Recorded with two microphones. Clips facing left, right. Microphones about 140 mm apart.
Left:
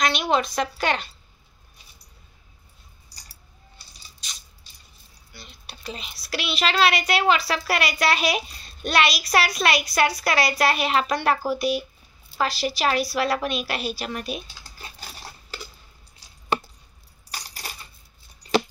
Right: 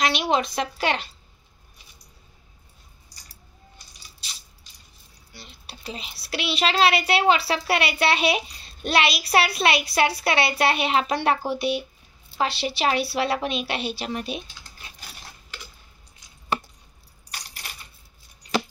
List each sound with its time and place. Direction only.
0.0 s a child's voice: 30° right (ahead or behind)
5.3 s a child's voice: 30° right (ahead or behind)
17.3 s coin: 35° left (ahead or behind)